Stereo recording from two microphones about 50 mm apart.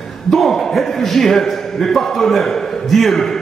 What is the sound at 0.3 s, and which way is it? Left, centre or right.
A man's voice, centre.